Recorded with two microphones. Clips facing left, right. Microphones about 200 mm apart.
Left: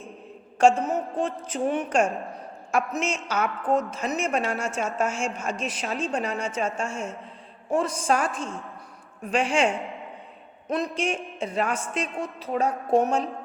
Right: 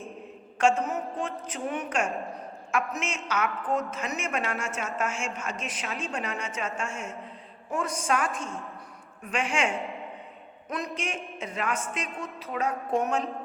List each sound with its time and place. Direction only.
0.6 s a woman's voice: 30° left (ahead or behind)
10.9 s a woman's voice: 30° left (ahead or behind)